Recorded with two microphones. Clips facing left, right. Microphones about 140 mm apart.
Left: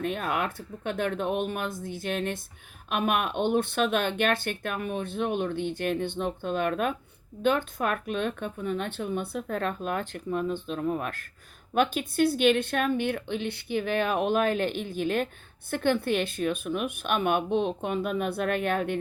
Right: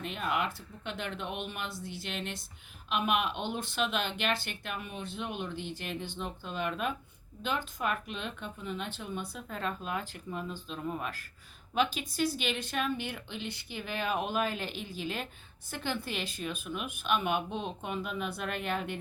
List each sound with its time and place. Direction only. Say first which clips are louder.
0.0 s speech: left 4 dB; 50° left (ahead or behind)